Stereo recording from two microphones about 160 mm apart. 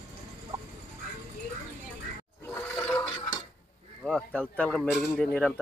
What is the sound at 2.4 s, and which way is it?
Toilet flush, 10° left (ahead or behind).